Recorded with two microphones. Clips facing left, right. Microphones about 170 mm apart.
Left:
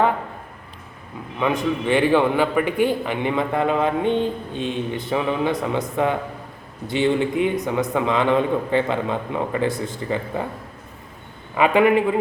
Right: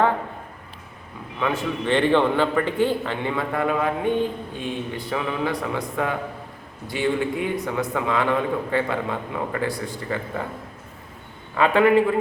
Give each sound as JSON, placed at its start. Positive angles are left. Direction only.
{"t": 1.4, "sound": "a man's voice", "side_deg": 15}
{"t": 11.5, "sound": "a man's voice", "side_deg": 15}